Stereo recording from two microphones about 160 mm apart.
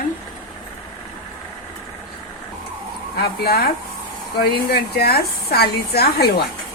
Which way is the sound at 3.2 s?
80° left.